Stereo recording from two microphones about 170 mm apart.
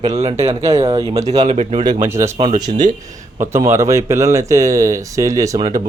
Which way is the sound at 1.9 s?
15° right (ahead or behind).